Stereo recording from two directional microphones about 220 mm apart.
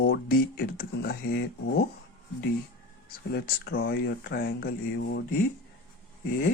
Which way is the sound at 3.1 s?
45° left (ahead or behind).